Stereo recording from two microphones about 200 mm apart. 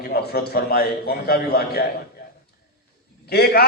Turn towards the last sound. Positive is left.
turn(degrees=55)  # may be behind; listen again after turning